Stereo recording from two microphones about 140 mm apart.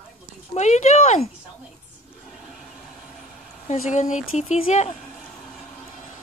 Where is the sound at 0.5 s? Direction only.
55° left (ahead or behind).